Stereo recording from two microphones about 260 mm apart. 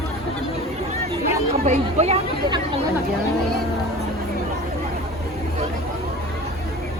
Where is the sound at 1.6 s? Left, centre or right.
Right.